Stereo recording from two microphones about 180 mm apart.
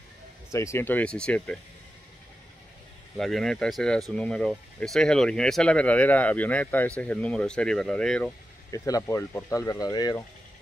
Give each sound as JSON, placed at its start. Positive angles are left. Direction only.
{"t": 0.5, "sound": "speech", "side_deg": 15}
{"t": 3.2, "sound": "speech", "side_deg": 0}
{"t": 8.7, "sound": "speech", "side_deg": 20}